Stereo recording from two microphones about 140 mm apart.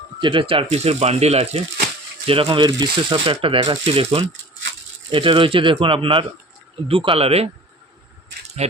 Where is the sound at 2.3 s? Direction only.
40° right (ahead or behind).